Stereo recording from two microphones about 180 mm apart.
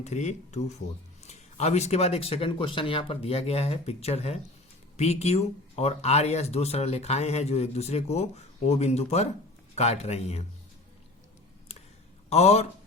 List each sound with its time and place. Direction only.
0.0 s speech: 40° left (ahead or behind)
12.3 s speech: 35° left (ahead or behind)